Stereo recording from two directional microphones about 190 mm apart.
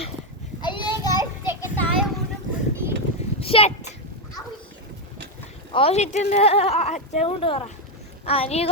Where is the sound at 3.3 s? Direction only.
30° left (ahead or behind).